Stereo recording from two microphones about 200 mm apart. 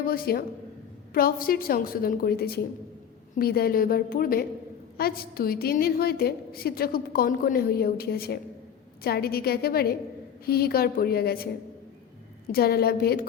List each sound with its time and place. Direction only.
0.0 s a woman's voice: 50° left (ahead or behind)
12.5 s a woman's voice: 50° left (ahead or behind)